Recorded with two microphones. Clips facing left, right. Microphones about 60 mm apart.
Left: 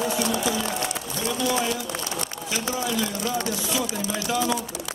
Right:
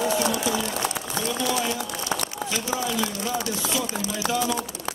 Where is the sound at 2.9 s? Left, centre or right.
Centre.